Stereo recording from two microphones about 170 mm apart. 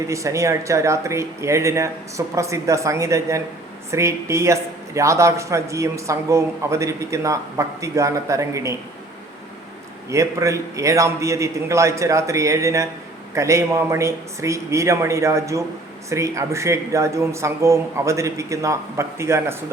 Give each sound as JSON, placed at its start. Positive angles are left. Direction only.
{"t": 0.1, "sound": "a man's voice", "side_deg": -20}
{"t": 10.1, "sound": "a man's voice", "side_deg": -20}